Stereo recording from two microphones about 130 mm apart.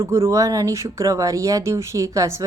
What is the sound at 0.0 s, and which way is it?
A woman's voice, 20° right (ahead or behind).